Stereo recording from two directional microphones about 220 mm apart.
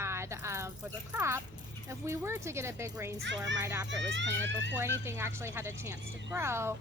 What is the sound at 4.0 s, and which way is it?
Speech, 55° right (ahead or behind).